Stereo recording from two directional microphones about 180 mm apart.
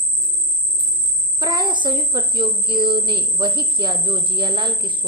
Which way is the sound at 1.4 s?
25° right (ahead or behind).